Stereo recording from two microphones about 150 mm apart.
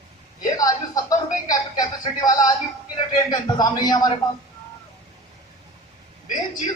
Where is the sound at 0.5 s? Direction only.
25° left (ahead or behind).